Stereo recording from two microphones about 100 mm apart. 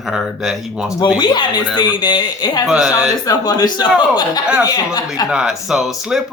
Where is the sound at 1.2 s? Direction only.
50° left (ahead or behind).